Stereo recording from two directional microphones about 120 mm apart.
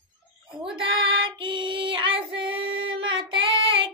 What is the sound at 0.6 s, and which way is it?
Child singing, 45° right (ahead or behind).